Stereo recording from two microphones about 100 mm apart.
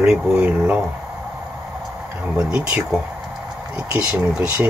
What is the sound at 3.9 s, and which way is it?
Speech, 15° right (ahead or behind).